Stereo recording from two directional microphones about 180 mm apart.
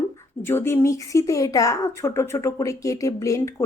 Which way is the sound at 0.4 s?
15° left (ahead or behind).